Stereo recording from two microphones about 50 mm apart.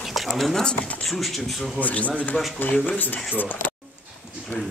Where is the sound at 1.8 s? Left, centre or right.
Left.